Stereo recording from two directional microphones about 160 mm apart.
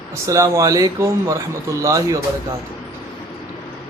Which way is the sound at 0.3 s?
20° right (ahead or behind).